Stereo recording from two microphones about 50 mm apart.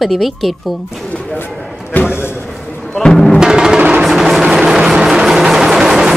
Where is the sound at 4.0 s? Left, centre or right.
Centre.